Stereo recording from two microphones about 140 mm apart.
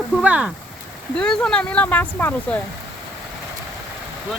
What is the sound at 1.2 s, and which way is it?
Speech, 5° left (ahead or behind).